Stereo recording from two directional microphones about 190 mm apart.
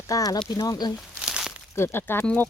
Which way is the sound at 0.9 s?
Centre (ahead or behind).